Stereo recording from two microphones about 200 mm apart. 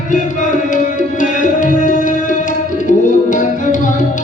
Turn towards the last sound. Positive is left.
turn(degrees=40)  # may be behind; listen again after turning